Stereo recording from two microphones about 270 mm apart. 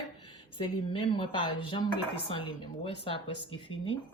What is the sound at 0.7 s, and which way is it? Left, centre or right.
Speech, left.